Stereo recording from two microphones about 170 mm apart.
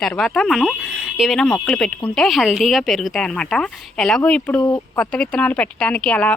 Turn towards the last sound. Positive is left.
turn(degrees=10)  # may be behind; listen again after turning